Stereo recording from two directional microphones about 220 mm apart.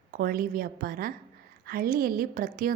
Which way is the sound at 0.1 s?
40° right (ahead or behind).